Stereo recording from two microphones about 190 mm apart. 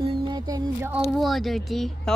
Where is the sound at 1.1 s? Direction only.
Centre (ahead or behind).